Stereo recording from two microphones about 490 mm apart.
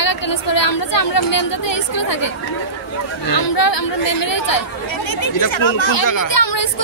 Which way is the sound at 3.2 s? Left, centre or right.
Left.